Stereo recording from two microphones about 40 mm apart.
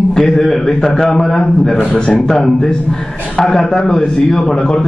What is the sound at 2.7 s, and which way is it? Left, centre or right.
Speech, left.